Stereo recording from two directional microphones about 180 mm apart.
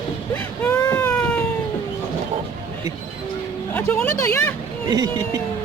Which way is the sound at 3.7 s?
10° left (ahead or behind).